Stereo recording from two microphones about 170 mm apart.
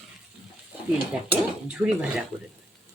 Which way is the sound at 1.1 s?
5° right (ahead or behind).